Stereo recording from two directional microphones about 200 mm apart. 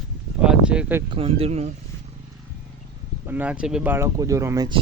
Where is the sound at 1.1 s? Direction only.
30° right (ahead or behind).